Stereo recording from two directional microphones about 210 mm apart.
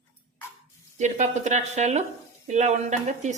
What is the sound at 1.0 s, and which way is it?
Speech, 35° right (ahead or behind).